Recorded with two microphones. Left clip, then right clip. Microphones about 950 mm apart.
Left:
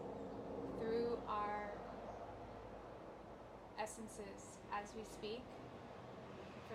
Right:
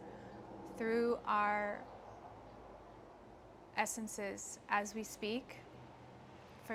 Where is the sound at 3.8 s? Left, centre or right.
Right.